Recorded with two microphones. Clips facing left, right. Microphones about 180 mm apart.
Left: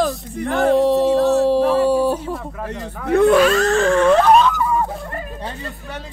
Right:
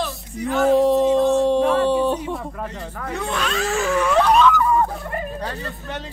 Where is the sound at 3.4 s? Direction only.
Centre (ahead or behind).